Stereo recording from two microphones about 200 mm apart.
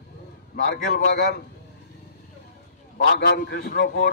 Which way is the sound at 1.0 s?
65° left (ahead or behind).